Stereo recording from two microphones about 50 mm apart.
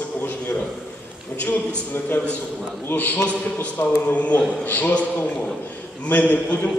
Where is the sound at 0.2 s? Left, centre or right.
Left.